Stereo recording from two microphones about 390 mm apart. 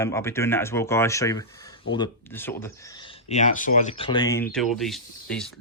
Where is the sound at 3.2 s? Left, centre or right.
Centre.